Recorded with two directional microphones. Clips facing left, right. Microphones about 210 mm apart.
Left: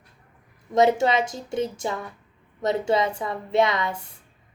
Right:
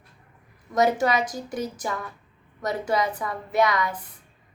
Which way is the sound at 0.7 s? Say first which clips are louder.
Left 2 dB; 25° left (ahead or behind).